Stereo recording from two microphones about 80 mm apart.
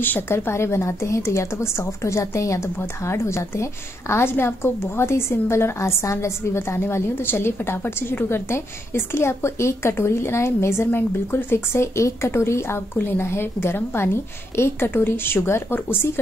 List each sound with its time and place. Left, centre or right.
0.0 s a woman's voice: left